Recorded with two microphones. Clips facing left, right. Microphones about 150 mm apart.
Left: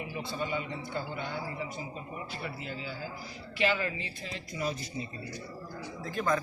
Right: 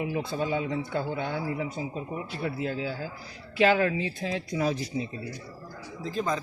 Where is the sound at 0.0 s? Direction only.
90° right.